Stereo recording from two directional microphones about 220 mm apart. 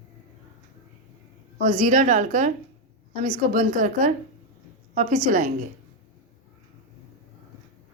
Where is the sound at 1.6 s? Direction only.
35° right (ahead or behind).